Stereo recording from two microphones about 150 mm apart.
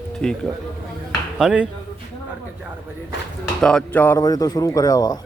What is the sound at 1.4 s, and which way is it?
Speech, 5° right (ahead or behind).